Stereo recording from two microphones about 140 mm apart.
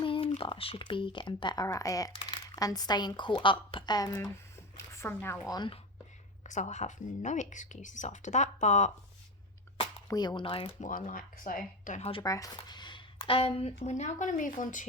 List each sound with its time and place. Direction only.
0.0 s a woman's voice: 40° left (ahead or behind); by 5.4 s 15° left (ahead or behind)
5.5 s speech: 30° left (ahead or behind)
6.4 s speech: 60° left (ahead or behind)
10.1 s speech: 30° left (ahead or behind)
10.8 s speech: 70° left (ahead or behind)
12.2 s speech: 25° left (ahead or behind); by 14.8 s 70° left (ahead or behind)